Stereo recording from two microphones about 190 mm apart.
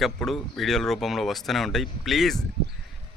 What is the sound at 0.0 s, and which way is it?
Speech, centre (ahead or behind).